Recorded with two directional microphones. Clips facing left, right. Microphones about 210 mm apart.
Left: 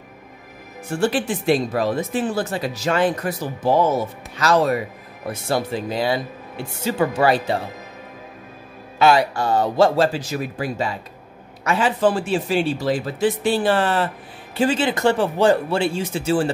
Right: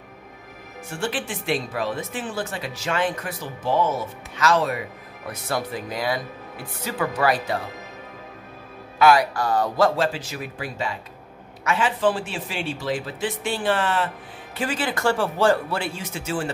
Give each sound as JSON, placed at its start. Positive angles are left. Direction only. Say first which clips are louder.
{"t": 0.9, "sound": "speech", "louder": "left 8 dB", "side_deg": 40}
{"t": 8.9, "sound": "speech", "louder": "left 1 dB", "side_deg": 25}
{"t": 14.6, "sound": "speech", "louder": "left 6 dB", "side_deg": 25}